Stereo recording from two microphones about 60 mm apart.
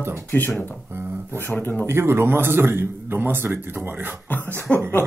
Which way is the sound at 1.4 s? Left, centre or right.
Left.